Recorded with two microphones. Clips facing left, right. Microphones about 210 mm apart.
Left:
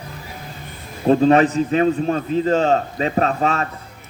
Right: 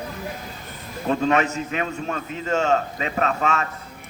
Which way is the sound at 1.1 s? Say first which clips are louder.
Left 7 dB; 35° left (ahead or behind).